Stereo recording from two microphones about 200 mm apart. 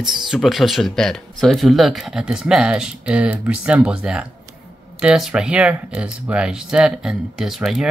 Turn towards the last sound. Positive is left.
turn(degrees=0)  # may be behind; listen again after turning